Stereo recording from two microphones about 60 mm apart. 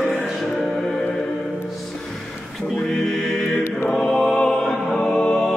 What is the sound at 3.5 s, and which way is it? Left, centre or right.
Choir, left.